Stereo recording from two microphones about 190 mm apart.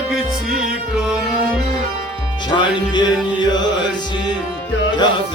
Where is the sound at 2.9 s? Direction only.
25° left (ahead or behind).